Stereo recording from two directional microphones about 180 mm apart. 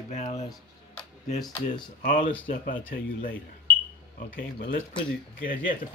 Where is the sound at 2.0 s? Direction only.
50° left (ahead or behind).